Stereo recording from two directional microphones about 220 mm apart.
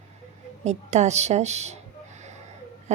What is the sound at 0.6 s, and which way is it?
A woman's voice, 30° right (ahead or behind).